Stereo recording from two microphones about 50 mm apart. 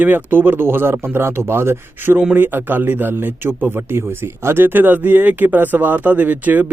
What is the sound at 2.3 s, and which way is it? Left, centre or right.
A man's voice, right.